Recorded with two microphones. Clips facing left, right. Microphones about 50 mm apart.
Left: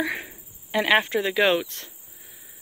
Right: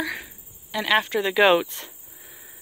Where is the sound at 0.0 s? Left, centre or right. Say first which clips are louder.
Left 2 dB; left.